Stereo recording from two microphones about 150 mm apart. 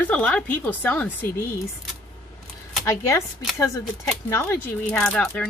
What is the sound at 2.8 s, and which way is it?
Speech, 20° left (ahead or behind).